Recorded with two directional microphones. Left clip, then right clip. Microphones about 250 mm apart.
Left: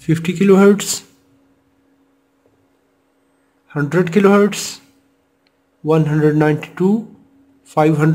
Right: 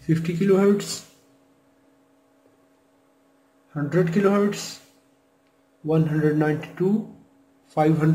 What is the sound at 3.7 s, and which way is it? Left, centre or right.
Speech, left.